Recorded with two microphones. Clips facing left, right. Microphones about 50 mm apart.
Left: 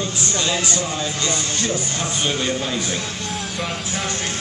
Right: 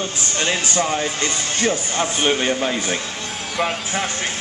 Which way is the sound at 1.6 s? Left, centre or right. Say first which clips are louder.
Right 3 dB; right.